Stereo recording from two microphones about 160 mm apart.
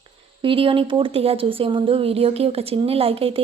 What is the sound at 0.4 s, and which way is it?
Speech, 35° right (ahead or behind).